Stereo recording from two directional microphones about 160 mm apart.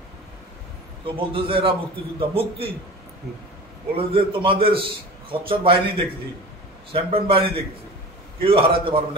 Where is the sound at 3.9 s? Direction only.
35° right (ahead or behind).